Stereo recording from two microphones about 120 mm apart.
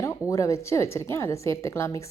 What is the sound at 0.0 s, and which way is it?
Speech, 25° left (ahead or behind).